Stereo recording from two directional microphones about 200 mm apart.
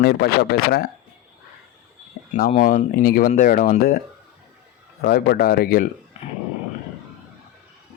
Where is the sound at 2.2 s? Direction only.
55° left (ahead or behind).